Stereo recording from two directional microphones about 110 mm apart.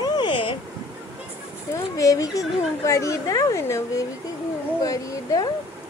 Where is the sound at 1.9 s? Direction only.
30° left (ahead or behind).